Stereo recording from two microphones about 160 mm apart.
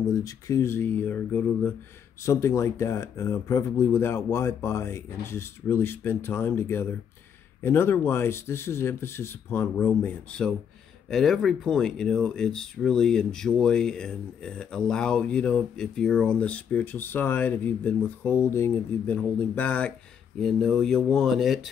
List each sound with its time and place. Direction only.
0.1 s speech: 20° left (ahead or behind); by 21.5 s centre (ahead or behind)